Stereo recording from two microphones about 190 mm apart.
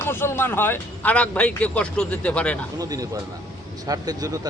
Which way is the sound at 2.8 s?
20° right (ahead or behind).